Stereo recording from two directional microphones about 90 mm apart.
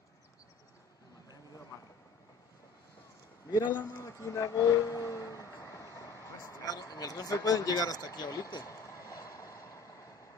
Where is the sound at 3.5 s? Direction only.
55° left (ahead or behind).